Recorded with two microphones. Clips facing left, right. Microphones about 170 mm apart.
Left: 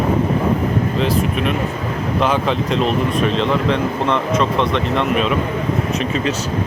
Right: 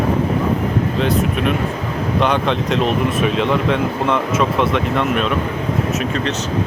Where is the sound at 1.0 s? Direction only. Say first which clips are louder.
Right 2 dB; centre (ahead or behind).